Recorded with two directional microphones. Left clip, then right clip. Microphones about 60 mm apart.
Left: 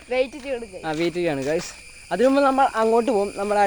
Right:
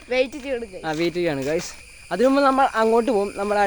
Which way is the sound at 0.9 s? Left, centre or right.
Right.